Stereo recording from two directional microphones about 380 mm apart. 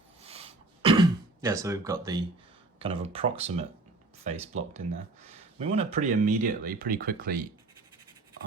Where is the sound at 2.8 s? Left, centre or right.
Centre.